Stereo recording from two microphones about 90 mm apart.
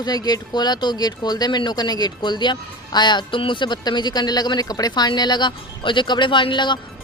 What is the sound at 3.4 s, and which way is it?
Speech, 65° left (ahead or behind).